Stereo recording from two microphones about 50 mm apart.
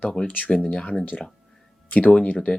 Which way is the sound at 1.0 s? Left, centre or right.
Left.